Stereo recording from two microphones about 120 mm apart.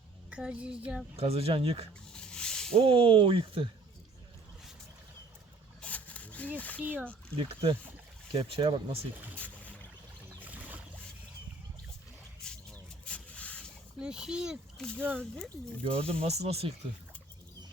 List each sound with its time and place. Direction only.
0.3 s a child's voice: 10° right (ahead or behind)
1.1 s speech: 55° right (ahead or behind)
2.1 s a sound: 5° left (ahead or behind)
2.7 s speech: 50° right (ahead or behind)
5.8 s a sound: 10° left (ahead or behind)
6.6 s speech: 10° left (ahead or behind)
6.8 s a child's voice: 15° right (ahead or behind)
7.3 s speech: 50° right (ahead or behind)
9.3 s a sound: 10° left (ahead or behind)
10.4 s boat: 15° right (ahead or behind)
12.4 s vehicle: 10° left (ahead or behind)
14.0 s a child's voice: 5° right (ahead or behind)
14.8 s speech: 10° left (ahead or behind)
15.8 s speech: 55° right (ahead or behind)